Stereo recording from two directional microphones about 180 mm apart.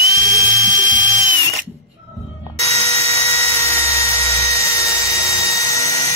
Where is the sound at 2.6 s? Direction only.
35° right (ahead or behind).